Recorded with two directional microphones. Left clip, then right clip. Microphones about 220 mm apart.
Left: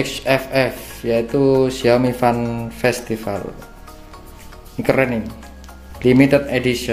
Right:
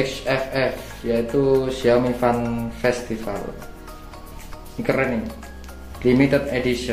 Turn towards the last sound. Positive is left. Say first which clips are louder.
# left 3 dB
turn(degrees=45)  # may be behind; listen again after turning